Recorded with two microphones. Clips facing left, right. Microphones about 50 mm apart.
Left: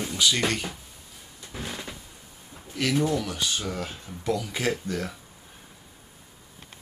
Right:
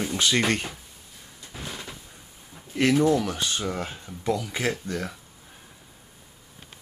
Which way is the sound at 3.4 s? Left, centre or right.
Centre.